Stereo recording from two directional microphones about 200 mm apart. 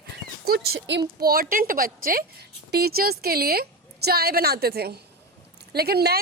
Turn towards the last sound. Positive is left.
turn(degrees=-50)  # may be behind; listen again after turning